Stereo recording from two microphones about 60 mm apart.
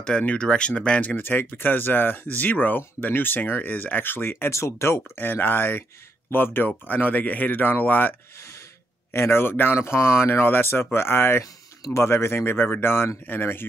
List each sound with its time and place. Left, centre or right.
0.2 s speech: left
1.1 s speech: left
9.1 s speech: left